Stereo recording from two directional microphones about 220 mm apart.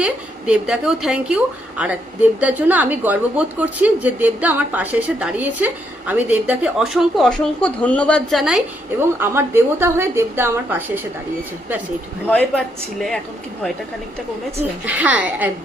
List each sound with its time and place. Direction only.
0.0 s a woman's voice: 5° right (ahead or behind)
9.0 s a woman's voice: 10° right (ahead or behind)
12.3 s speech: 5° left (ahead or behind)
14.6 s a woman's voice: 5° right (ahead or behind)